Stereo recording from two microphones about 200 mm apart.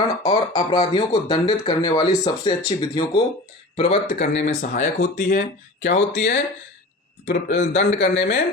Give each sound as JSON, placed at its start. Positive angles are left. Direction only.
{"t": 0.3, "sound": "speech", "side_deg": 30}
{"t": 5.8, "sound": "speech", "side_deg": 60}